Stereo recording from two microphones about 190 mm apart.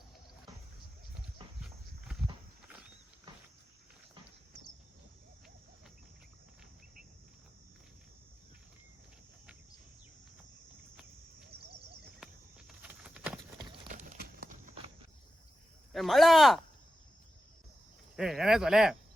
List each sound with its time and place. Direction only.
1.6 s walk: centre (ahead or behind)
11.5 s a sound: 60° right (ahead or behind)
12.2 s a sound: 5° right (ahead or behind)
13.9 s run: 45° right (ahead or behind)
15.9 s speech: centre (ahead or behind)
18.2 s speech: centre (ahead or behind)